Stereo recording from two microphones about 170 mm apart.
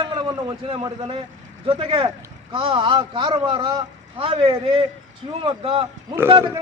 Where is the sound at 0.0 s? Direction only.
30° right (ahead or behind).